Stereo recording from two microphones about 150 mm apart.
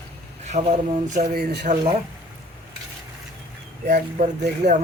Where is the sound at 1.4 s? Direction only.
85° right.